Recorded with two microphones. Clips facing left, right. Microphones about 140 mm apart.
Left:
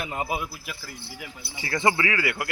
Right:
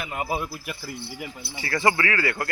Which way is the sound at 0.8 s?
10° right (ahead or behind).